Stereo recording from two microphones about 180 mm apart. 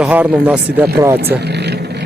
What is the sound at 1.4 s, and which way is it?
Vehicle, 65° right (ahead or behind).